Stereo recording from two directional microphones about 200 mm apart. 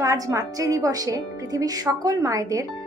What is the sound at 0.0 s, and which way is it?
A woman's voice, 15° right (ahead or behind).